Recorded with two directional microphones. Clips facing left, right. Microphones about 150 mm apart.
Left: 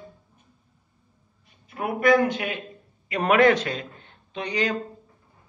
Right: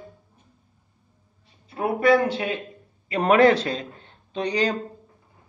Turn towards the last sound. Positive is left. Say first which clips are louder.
# right 3 dB
turn(degrees=-35)  # may be behind; listen again after turning